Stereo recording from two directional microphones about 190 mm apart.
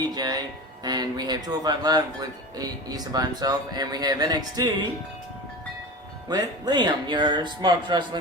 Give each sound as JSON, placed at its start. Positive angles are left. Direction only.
{"t": 0.1, "sound": "speech", "side_deg": -20}
{"t": 6.2, "sound": "speech", "side_deg": -20}